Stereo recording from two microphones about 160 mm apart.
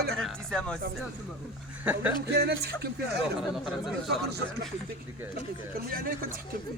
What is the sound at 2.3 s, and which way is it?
Speech, 90° right.